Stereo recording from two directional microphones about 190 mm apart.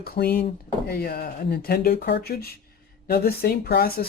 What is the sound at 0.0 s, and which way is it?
Speech, 50° left (ahead or behind).